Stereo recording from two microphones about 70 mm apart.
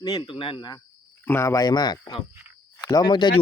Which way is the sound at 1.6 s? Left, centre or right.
Left.